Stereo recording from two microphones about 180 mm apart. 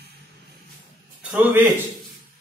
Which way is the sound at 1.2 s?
10° right (ahead or behind).